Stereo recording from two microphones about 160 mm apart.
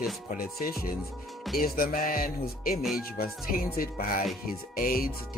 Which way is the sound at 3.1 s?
65° left (ahead or behind).